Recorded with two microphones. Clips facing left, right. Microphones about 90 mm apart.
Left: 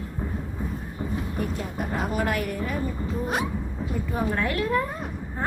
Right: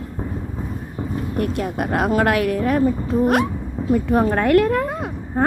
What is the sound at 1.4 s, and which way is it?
A woman's voice, 80° right.